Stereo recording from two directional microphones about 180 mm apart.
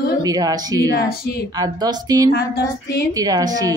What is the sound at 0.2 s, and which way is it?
A woman's voice, 20° right (ahead or behind).